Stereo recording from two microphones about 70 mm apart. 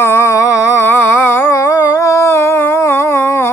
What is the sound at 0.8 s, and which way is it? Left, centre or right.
Mantra, left.